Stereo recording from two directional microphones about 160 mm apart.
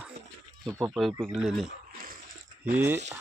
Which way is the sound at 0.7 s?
20° right (ahead or behind).